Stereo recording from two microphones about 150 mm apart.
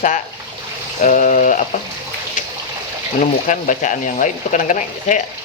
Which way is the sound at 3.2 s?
60° left (ahead or behind).